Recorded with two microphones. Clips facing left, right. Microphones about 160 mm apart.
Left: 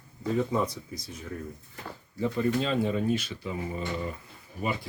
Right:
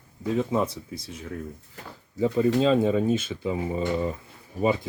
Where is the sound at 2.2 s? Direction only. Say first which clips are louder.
Right 6 dB; 20° right (ahead or behind).